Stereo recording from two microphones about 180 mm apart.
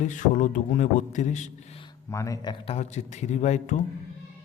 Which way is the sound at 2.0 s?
15° left (ahead or behind).